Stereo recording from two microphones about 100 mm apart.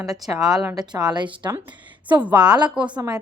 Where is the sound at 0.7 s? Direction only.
40° right (ahead or behind).